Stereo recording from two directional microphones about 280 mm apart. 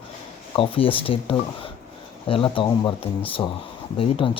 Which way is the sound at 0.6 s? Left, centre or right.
Centre.